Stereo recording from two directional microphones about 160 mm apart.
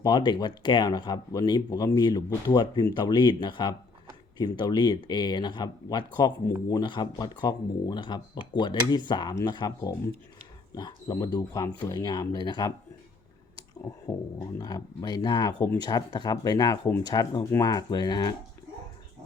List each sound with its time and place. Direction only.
0.0 s speech: 25° left (ahead or behind)
14.3 s speech: 25° left (ahead or behind)